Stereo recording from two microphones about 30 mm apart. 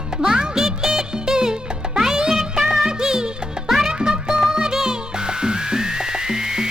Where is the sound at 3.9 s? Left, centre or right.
Right.